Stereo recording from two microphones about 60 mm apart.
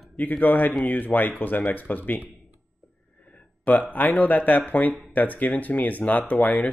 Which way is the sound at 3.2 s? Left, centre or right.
Left.